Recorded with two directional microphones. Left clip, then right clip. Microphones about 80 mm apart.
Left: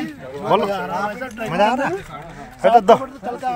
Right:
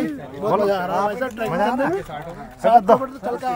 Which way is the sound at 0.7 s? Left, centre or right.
Right.